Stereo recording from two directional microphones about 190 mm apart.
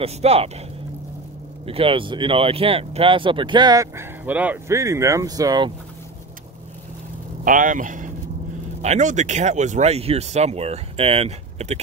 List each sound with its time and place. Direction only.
0.0 s speech: 30° right (ahead or behind)
1.7 s speech: 30° right (ahead or behind)
7.4 s speech: 45° right (ahead or behind)